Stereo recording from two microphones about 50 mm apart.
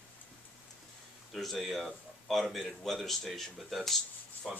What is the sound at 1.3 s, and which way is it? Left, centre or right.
A man's voice, centre.